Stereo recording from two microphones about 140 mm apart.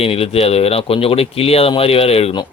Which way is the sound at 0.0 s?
45° left (ahead or behind).